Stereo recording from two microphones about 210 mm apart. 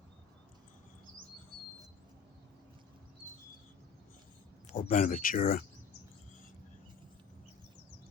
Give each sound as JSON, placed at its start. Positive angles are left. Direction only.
{"t": 4.8, "sound": "speech", "side_deg": 40}